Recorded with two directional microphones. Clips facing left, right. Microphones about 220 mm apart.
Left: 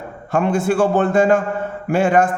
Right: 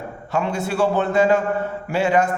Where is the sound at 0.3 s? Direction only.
50° left (ahead or behind).